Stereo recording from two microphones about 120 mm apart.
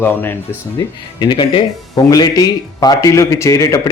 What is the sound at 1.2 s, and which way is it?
A man's voice, 40° left (ahead or behind).